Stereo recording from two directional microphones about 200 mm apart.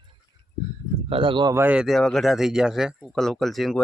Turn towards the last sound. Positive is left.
turn(degrees=0)  # may be behind; listen again after turning